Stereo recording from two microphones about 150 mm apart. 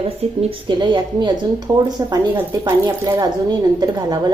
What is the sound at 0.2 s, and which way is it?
Speech, 45° right (ahead or behind).